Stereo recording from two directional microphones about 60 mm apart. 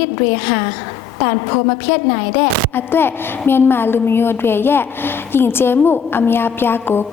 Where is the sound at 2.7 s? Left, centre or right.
Left.